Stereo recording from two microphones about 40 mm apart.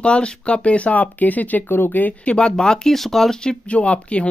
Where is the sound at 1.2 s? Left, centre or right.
Left.